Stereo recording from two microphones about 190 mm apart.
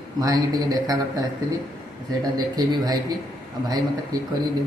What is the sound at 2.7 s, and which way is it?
Speech, 20° right (ahead or behind).